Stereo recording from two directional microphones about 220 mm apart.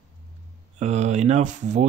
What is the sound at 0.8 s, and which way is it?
Speech, 30° right (ahead or behind).